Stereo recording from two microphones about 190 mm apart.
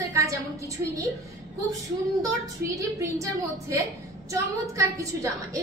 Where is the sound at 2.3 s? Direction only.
15° right (ahead or behind).